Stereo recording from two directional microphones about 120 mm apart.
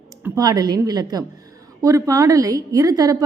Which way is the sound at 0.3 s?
35° right (ahead or behind).